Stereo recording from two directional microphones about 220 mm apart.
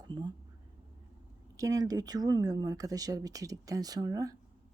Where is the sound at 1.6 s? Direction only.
15° right (ahead or behind).